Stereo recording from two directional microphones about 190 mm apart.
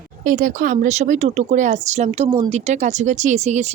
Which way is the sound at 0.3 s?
45° right (ahead or behind).